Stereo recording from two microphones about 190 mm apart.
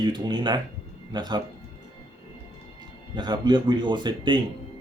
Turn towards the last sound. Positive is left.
turn(degrees=-25)  # may be behind; listen again after turning